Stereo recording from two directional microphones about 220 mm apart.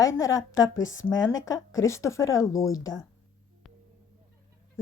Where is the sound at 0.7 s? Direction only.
60° left (ahead or behind).